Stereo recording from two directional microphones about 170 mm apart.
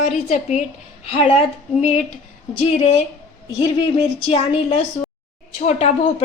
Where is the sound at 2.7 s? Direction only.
35° left (ahead or behind).